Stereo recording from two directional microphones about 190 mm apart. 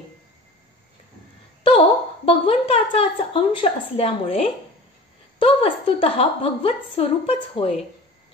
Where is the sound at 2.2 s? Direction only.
30° left (ahead or behind).